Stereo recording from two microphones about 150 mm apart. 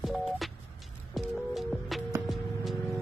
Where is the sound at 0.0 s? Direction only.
Centre (ahead or behind).